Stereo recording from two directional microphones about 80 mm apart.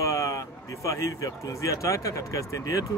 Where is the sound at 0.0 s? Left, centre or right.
Left.